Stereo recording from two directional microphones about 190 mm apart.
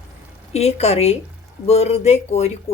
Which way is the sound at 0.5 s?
35° left (ahead or behind).